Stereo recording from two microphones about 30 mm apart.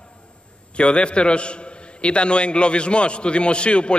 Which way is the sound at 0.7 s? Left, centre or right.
Left.